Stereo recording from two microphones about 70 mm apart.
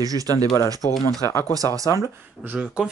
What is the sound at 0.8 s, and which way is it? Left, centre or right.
Speech, left.